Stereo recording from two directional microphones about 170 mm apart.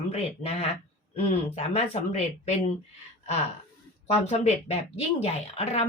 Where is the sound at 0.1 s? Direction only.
35° left (ahead or behind).